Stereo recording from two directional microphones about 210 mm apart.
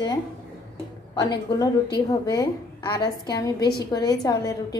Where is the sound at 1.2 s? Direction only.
20° left (ahead or behind).